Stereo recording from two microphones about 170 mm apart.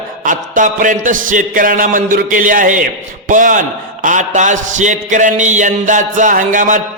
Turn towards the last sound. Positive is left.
turn(degrees=-50)  # may be behind; listen again after turning